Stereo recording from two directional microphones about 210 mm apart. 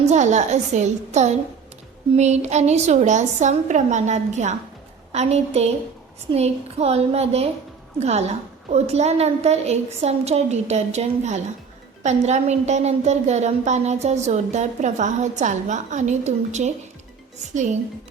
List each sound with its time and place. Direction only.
0.1 s a woman's voice: 35° right (ahead or behind)